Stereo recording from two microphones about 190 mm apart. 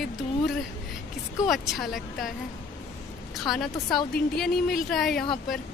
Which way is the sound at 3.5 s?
Centre (ahead or behind).